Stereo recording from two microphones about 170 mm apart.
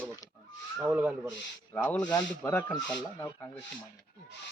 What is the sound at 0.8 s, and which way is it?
Speech, 10° right (ahead or behind).